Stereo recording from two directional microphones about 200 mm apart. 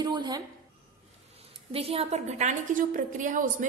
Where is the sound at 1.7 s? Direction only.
30° right (ahead or behind).